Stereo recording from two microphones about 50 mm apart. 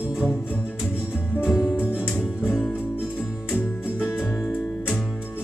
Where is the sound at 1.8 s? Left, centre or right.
Left.